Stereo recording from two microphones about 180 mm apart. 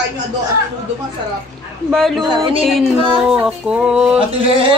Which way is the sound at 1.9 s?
Centre (ahead or behind).